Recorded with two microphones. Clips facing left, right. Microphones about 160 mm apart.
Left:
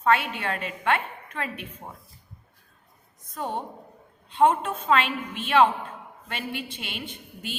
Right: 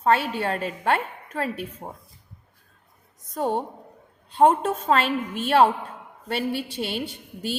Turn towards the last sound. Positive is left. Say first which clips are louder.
# right 6 dB
turn(degrees=-40)  # may be behind; listen again after turning